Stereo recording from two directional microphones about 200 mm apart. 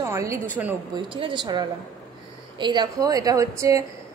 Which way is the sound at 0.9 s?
25° right (ahead or behind).